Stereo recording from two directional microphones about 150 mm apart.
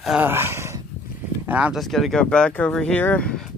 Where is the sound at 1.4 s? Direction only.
5° right (ahead or behind).